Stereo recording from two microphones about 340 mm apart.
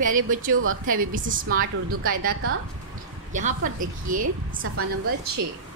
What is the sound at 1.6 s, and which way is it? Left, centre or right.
Speech, right.